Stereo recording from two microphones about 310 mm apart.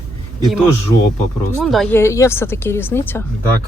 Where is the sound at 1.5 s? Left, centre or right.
Centre.